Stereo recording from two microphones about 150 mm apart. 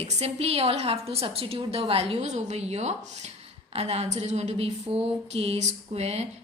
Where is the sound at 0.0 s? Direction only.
45° right (ahead or behind).